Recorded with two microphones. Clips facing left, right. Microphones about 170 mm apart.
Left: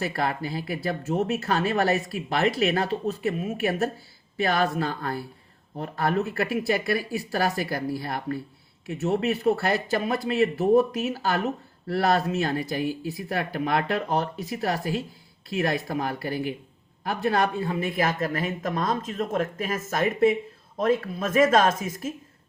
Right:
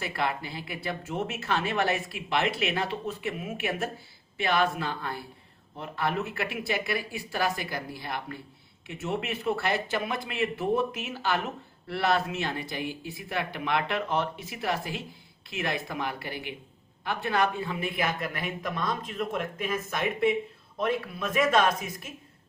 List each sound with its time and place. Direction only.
0.1 s speech: 45° left (ahead or behind)